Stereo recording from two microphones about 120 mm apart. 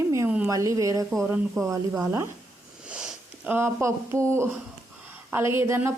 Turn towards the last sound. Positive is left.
turn(degrees=-20)  # may be behind; listen again after turning